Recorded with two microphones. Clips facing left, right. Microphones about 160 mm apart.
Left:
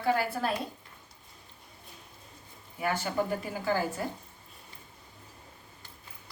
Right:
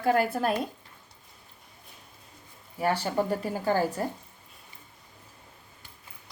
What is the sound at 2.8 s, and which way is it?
Speech, 35° right (ahead or behind).